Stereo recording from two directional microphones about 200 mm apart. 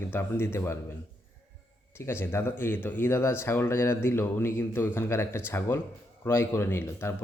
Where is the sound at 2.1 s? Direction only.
10° left (ahead or behind).